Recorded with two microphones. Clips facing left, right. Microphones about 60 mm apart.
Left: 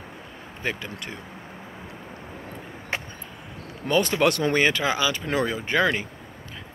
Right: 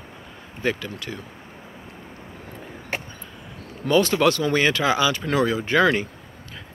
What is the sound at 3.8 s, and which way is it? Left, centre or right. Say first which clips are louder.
Speech: right 3 dB; left.